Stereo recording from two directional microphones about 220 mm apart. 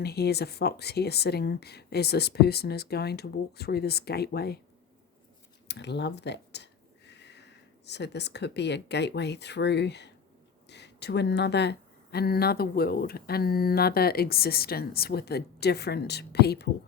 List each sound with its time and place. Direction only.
0.0 s speech: 45° left (ahead or behind)
5.6 s speech: 50° left (ahead or behind)